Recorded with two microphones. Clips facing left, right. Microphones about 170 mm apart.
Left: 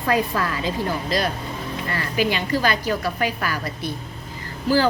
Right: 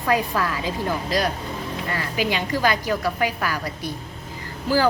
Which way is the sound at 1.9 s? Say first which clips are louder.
Left 2 dB; 15° right (ahead or behind).